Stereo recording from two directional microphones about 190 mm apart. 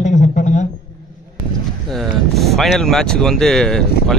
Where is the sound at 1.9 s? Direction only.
Centre (ahead or behind).